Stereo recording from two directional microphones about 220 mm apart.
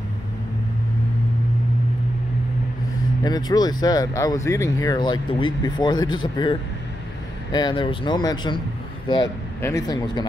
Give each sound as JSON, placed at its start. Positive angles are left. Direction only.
{"t": 3.3, "sound": "speech", "side_deg": 15}
{"t": 9.6, "sound": "speech", "side_deg": 15}